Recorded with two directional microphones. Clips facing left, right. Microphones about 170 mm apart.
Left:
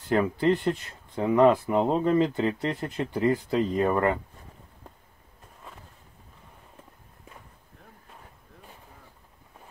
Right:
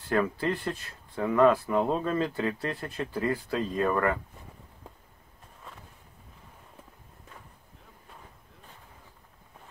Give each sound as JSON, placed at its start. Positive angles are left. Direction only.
{"t": 0.1, "sound": "speech", "side_deg": 20}